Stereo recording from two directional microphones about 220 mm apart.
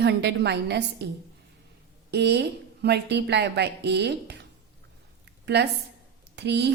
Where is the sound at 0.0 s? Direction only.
50° right (ahead or behind).